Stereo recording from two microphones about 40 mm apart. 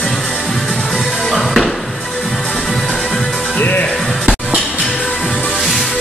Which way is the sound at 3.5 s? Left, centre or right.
Left.